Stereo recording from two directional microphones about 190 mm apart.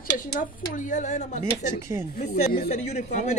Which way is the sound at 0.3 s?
40° left (ahead or behind).